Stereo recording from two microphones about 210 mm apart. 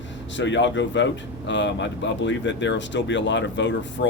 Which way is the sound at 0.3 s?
60° left (ahead or behind).